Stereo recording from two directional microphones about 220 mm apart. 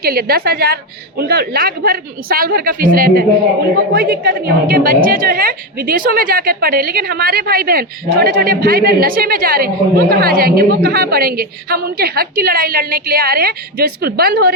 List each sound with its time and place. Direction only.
0.0 s a woman's voice: 45° right (ahead or behind)